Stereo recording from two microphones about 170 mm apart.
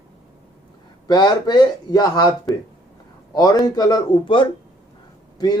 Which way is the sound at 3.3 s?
20° left (ahead or behind).